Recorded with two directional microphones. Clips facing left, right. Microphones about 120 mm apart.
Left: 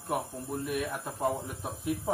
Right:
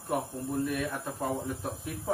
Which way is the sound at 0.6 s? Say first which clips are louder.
Right 1 dB; 15° left (ahead or behind).